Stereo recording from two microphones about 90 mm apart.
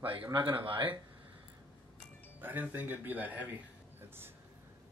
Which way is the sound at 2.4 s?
20° right (ahead or behind).